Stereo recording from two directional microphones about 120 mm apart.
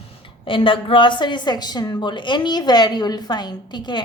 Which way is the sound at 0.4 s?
45° left (ahead or behind).